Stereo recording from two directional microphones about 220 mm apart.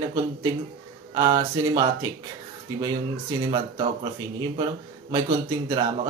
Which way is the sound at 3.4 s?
20° right (ahead or behind).